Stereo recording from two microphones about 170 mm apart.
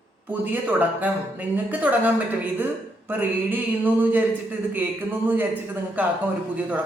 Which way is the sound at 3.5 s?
10° right (ahead or behind).